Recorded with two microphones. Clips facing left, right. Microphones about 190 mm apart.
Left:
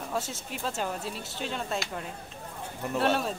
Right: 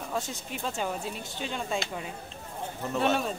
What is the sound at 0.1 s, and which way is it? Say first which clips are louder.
Speech: even; centre (ahead or behind).